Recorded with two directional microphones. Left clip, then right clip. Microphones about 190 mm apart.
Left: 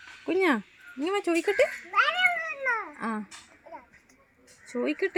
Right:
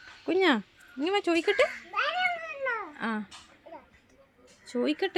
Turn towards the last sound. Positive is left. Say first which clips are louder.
# even
turn(degrees=-30)  # may be behind; listen again after turning